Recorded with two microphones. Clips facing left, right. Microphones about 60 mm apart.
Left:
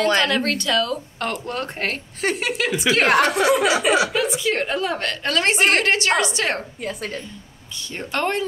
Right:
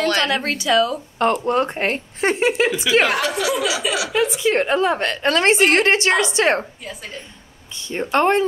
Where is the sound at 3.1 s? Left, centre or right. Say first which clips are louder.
Left 4 dB; left.